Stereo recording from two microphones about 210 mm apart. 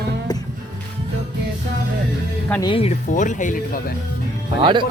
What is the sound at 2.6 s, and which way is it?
Speech, 25° left (ahead or behind).